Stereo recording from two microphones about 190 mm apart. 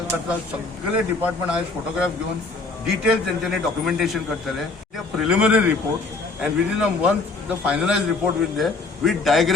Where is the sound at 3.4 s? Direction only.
Centre (ahead or behind).